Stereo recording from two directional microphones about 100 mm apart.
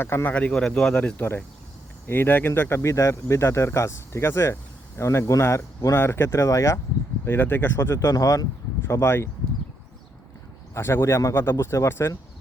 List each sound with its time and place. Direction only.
0.0 s speech: 25° left (ahead or behind)
0.3 s speech: 10° left (ahead or behind); by 6.7 s 30° left (ahead or behind)
7.3 s speech: 20° left (ahead or behind)
10.8 s speech: 25° left (ahead or behind)